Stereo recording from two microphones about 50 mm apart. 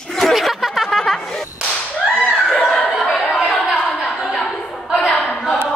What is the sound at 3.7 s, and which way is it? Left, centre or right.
Chuckle, left.